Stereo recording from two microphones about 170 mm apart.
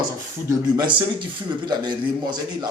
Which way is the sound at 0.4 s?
25° right (ahead or behind).